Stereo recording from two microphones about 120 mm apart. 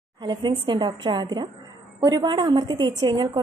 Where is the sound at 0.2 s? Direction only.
40° right (ahead or behind).